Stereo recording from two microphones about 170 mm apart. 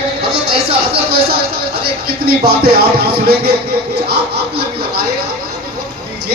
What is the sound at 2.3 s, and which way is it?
Music, 65° right (ahead or behind).